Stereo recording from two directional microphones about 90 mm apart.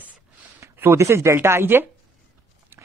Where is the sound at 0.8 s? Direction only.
30° right (ahead or behind).